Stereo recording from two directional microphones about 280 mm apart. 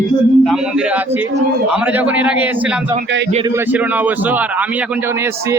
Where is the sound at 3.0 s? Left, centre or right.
Right.